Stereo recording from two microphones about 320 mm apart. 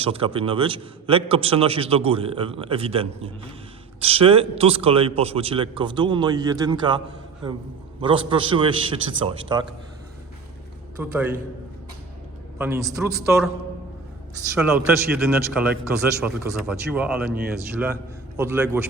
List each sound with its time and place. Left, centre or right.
0.0 s a man's voice: centre
8.0 s a man's voice: centre
11.0 s a man's voice: centre
12.5 s a man's voice: centre
14.5 s a man's voice: centre
18.3 s a man's voice: centre